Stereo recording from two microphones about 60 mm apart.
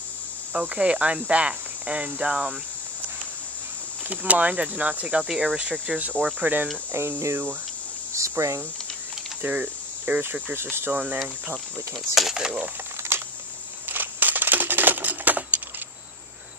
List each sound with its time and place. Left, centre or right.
0.5 s cricket: centre
4.1 s cricket: right
5.3 s speech: centre
6.4 s cricket: right
6.9 s cricket: right
9.4 s cricket: right
10.5 s speech: right
12.1 s speech: centre
12.4 s speech: centre
13.1 s a sound: right